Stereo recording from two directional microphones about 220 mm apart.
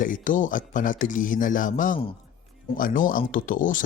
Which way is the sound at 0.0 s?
35° left (ahead or behind).